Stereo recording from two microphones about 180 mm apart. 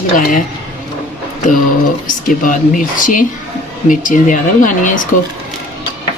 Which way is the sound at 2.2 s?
50° left (ahead or behind).